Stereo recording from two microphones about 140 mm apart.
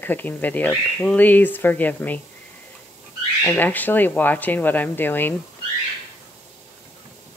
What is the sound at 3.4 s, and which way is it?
Speech, 10° left (ahead or behind).